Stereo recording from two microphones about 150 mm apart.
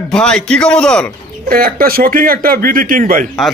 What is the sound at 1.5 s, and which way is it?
Speech, 75° right (ahead or behind).